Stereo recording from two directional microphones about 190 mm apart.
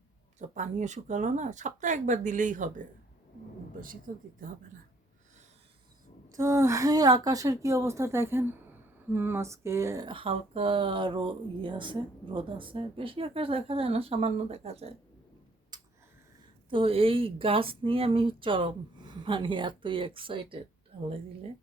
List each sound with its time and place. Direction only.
0.3 s speech: 40° right (ahead or behind)
4.1 s speech: 45° right (ahead or behind)
6.2 s a woman's voice: 15° right (ahead or behind); by 14.9 s 35° right (ahead or behind)
16.6 s a woman's voice: 30° right (ahead or behind)